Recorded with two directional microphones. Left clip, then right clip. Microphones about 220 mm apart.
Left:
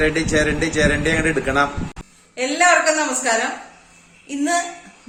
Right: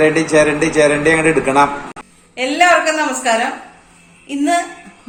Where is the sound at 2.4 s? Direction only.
15° left (ahead or behind).